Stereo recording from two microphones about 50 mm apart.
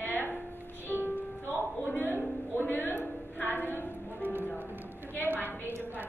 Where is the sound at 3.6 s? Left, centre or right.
Left.